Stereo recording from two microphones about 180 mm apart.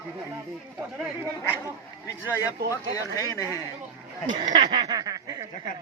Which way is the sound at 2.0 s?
10° left (ahead or behind).